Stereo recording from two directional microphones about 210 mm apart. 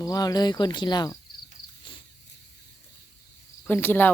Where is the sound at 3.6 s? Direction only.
10° left (ahead or behind).